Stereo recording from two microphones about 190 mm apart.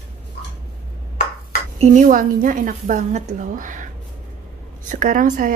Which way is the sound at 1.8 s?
45° right (ahead or behind).